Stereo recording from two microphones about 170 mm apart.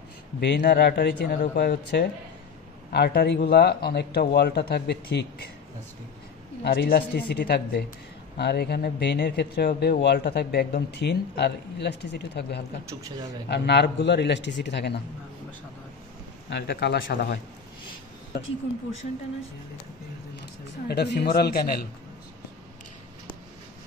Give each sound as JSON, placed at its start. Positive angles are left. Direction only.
{"t": 0.4, "sound": "speech", "side_deg": 80}
{"t": 6.6, "sound": "speech", "side_deg": 85}
{"t": 13.5, "sound": "a man's voice", "side_deg": 90}
{"t": 16.4, "sound": "a man's voice", "side_deg": 80}
{"t": 20.9, "sound": "speech", "side_deg": 80}